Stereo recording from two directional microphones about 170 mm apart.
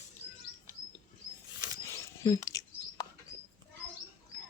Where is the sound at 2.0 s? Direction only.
20° left (ahead or behind).